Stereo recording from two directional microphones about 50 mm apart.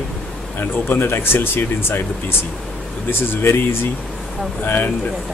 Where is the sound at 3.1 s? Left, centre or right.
Left.